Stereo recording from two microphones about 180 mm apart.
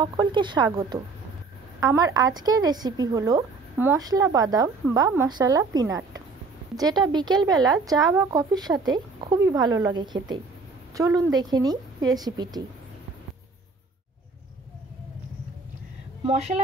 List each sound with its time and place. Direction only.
0.0 s a woman's voice: 25° right (ahead or behind)
16.3 s a woman's voice: 35° right (ahead or behind)